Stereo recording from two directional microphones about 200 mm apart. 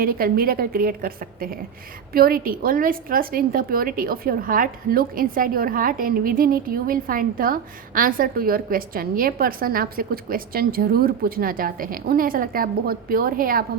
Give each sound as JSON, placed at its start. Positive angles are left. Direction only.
{"t": 0.0, "sound": "a woman's voice", "side_deg": -45}